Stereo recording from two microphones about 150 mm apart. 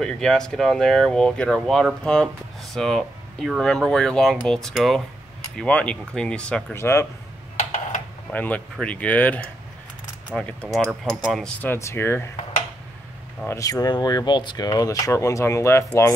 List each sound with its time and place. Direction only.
0.0 s speech: 5° left (ahead or behind)
6.8 s speech: 20° left (ahead or behind)
7.5 s computer keyboard: 60° left (ahead or behind)
8.3 s speech: 10° left (ahead or behind)
11.6 s speech: 15° left (ahead or behind)
13.5 s speech: 20° left (ahead or behind)